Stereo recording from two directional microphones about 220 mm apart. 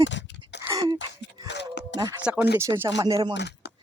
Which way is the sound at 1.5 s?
50° left (ahead or behind).